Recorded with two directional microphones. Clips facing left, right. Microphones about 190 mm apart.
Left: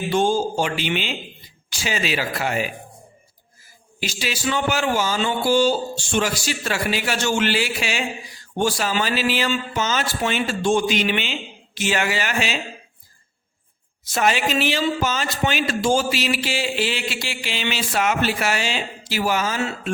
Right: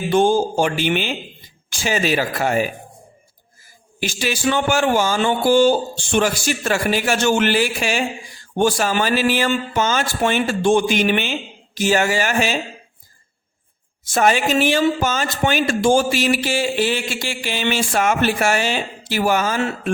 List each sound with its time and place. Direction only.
0.1 s a man's voice: 55° right (ahead or behind)
4.0 s a man's voice: 50° right (ahead or behind)
14.0 s a man's voice: 45° right (ahead or behind)